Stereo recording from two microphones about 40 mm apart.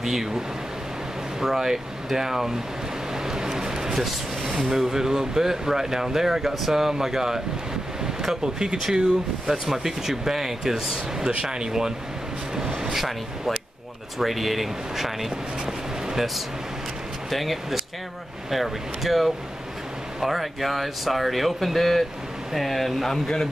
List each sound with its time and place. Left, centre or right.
0.0 s speech: centre
1.4 s speech: centre
3.3 s vehicle: centre
4.0 s speech: centre
12.5 s vehicle: centre
14.1 s speech: centre
17.3 s speech: centre
23.1 s a man's voice: centre